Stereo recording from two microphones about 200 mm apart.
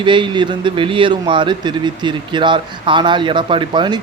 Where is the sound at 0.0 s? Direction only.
25° right (ahead or behind).